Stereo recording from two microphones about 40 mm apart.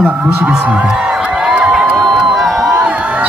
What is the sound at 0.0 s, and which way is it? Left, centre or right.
Speech, right.